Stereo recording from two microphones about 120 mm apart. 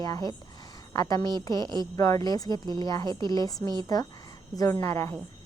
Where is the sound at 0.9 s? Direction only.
30° left (ahead or behind).